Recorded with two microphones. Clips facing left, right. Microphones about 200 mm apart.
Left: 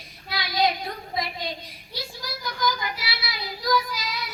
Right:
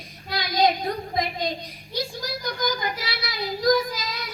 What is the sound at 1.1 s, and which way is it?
Speech, 45° right (ahead or behind).